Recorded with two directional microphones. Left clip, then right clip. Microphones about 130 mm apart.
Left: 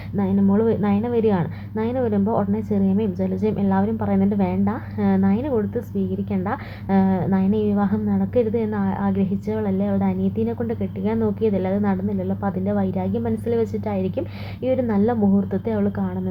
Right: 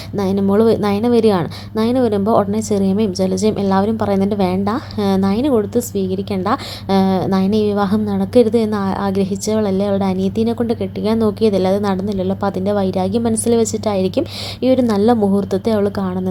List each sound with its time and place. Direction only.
0.2 s a woman's voice: 55° right (ahead or behind)